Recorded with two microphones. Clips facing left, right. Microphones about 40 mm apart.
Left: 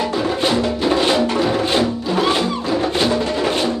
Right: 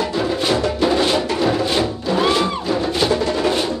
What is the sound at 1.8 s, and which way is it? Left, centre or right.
Music, centre.